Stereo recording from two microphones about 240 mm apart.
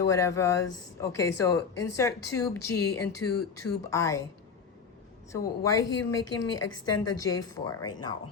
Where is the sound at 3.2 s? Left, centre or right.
Left.